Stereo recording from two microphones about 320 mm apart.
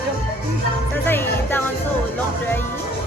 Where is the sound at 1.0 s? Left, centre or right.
Centre.